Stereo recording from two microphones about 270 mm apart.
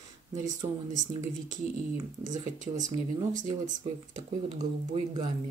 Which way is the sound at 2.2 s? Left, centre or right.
Right.